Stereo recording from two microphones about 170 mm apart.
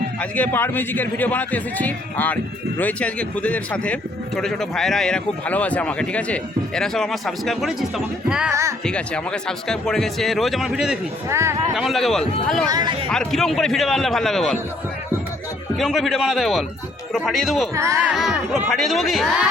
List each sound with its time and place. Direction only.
0.2 s a man's voice: 10° left (ahead or behind)
11.3 s speech: 15° right (ahead or behind)
11.7 s a man's voice: centre (ahead or behind)
12.6 s speech: 25° right (ahead or behind)
13.1 s a man's voice: centre (ahead or behind)
15.8 s a man's voice: centre (ahead or behind)
17.7 s speech: 15° right (ahead or behind)
18.1 s a man's voice: centre (ahead or behind)